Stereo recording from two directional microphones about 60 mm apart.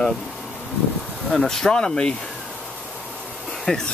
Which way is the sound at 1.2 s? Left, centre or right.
Centre.